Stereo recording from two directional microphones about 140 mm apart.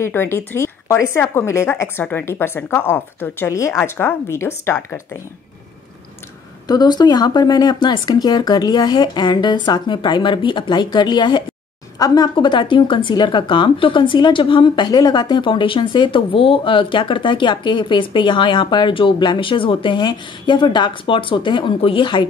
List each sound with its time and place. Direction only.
0.0 s a woman's voice: 15° left (ahead or behind)
6.7 s speech: 30° left (ahead or behind)